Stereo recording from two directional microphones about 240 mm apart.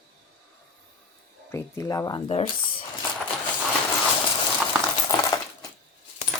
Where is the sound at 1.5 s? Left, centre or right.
Centre.